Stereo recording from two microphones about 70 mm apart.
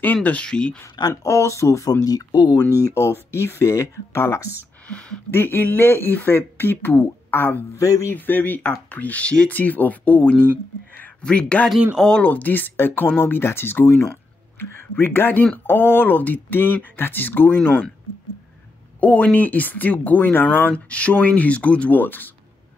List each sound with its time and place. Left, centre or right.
0.0 s speech: left
1.2 s speech: left
2.0 s speech: left
2.7 s speech: left
4.8 s speech: centre
5.3 s speech: left
7.7 s speech: left
8.1 s speech: left
18.9 s speech: left